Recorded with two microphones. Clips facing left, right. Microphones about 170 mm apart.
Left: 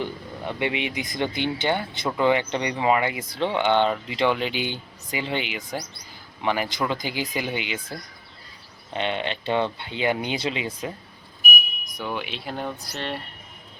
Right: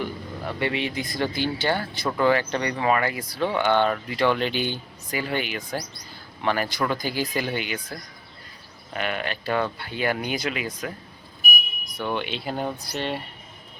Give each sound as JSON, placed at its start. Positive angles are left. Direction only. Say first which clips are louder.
{"t": 0.0, "sound": "speech", "louder": "even", "side_deg": 20}
{"t": 11.9, "sound": "speech", "louder": "right 3 dB", "side_deg": 5}